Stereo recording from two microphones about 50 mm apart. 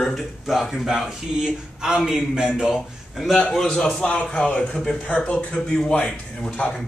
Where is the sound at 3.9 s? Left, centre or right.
Left.